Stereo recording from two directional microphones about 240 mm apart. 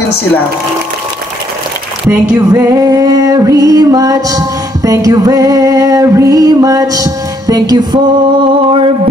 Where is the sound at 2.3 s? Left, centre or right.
Centre.